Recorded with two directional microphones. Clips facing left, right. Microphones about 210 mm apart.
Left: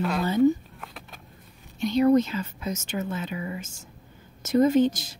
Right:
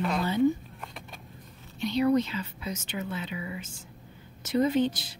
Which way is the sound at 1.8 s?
45° left (ahead or behind).